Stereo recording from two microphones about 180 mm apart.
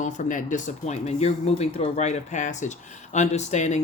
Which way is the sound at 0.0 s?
45° left (ahead or behind).